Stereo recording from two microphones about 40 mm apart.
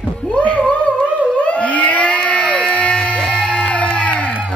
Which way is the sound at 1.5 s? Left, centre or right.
Left.